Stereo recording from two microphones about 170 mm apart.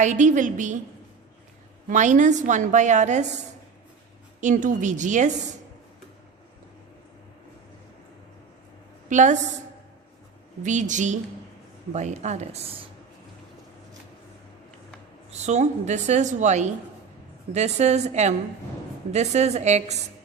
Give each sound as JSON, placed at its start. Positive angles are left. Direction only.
{"t": 0.0, "sound": "a woman's voice", "side_deg": -45}
{"t": 1.9, "sound": "a woman's voice", "side_deg": -45}
{"t": 4.4, "sound": "a woman's voice", "side_deg": -50}
{"t": 9.0, "sound": "a woman's voice", "side_deg": -45}
{"t": 10.6, "sound": "a woman's voice", "side_deg": -45}
{"t": 15.3, "sound": "a woman's voice", "side_deg": -40}